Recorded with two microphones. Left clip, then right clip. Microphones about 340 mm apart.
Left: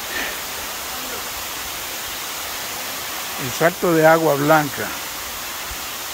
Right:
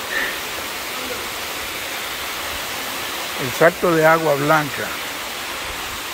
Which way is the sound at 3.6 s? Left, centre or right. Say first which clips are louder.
Right 1 dB; centre.